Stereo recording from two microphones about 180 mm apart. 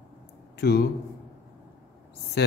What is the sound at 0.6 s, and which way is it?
Speech, 60° left (ahead or behind).